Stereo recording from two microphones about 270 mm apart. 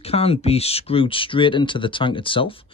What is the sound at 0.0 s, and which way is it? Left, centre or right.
Speech, left.